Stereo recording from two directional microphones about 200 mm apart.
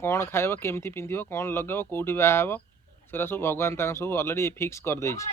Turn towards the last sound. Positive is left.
turn(degrees=15)  # may be behind; listen again after turning